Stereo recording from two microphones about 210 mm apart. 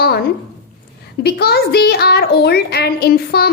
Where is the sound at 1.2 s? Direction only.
50° left (ahead or behind).